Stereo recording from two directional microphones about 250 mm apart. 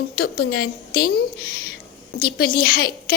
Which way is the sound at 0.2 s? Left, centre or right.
Left.